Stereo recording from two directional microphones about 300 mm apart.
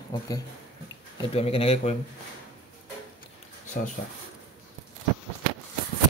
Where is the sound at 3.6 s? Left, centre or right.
Left.